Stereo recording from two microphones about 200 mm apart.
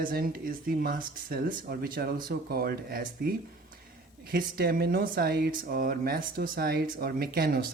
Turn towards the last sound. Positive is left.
turn(degrees=-50)  # may be behind; listen again after turning